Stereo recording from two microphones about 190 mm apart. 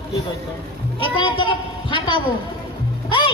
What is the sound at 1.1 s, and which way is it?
A woman's voice, 25° left (ahead or behind).